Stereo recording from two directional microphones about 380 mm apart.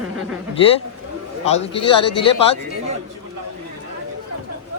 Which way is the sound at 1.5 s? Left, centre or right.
Centre.